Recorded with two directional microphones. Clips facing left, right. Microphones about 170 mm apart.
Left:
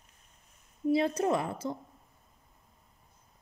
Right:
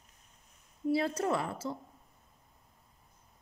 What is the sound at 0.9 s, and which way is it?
Speech, 20° left (ahead or behind).